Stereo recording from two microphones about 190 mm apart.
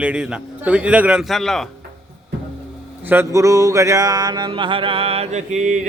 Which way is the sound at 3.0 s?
10° right (ahead or behind).